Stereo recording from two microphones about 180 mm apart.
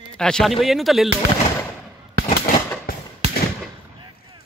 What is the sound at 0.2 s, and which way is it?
Speech, centre (ahead or behind).